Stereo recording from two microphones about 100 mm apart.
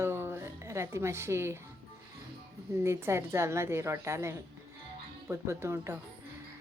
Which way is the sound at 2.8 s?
25° right (ahead or behind).